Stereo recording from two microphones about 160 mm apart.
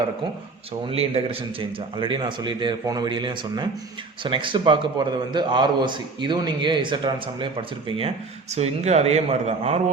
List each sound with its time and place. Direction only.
0.9 s a man's voice: 35° right (ahead or behind)